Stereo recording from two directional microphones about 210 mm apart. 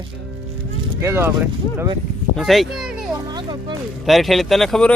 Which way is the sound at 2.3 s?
Centre (ahead or behind).